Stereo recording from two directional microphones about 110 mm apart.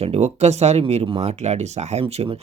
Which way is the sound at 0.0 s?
75° right (ahead or behind).